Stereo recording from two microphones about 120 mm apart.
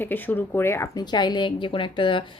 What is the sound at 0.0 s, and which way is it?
Speech, 15° left (ahead or behind).